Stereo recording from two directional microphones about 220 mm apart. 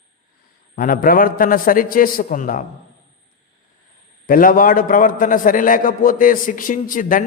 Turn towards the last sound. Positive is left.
turn(degrees=40)  # may be behind; listen again after turning